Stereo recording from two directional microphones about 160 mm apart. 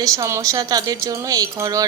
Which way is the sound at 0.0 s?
20° right (ahead or behind).